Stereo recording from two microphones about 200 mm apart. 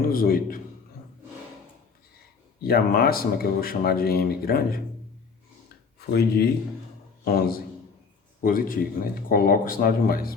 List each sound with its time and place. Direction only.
0.0 s speech: 45° left (ahead or behind)
2.6 s speech: 50° left (ahead or behind)
6.1 s speech: 50° left (ahead or behind)